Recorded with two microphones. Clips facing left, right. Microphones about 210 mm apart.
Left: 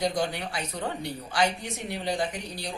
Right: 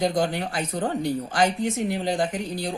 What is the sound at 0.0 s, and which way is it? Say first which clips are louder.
A woman's voice: right 4 dB; 50° right (ahead or behind).